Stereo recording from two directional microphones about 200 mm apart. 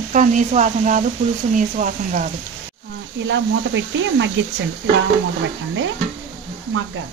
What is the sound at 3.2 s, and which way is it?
Speech, 65° right (ahead or behind).